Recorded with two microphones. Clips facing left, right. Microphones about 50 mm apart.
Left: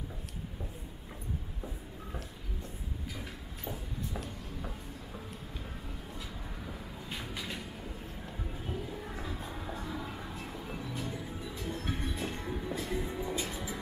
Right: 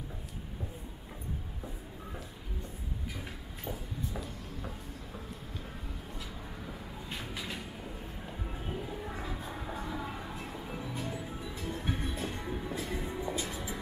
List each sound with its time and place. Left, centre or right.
3.6 s a sound: centre
4.6 s train: centre
6.6 s vehicle: centre
8.5 s music: centre